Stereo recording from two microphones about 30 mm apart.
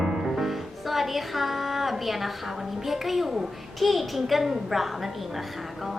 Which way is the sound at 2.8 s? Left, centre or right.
Centre.